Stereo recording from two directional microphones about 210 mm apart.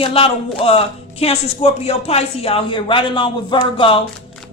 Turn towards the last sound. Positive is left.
turn(degrees=25)  # may be behind; listen again after turning